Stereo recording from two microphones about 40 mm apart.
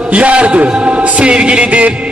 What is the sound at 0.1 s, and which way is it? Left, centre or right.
A man's voice, right.